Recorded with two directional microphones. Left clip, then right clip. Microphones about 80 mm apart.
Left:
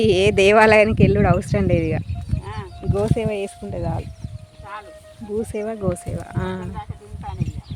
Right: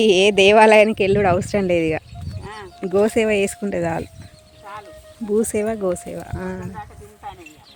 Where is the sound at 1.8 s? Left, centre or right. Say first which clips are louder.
Right 3 dB; right.